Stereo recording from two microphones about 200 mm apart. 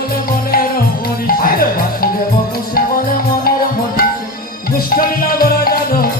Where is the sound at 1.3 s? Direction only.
45° left (ahead or behind).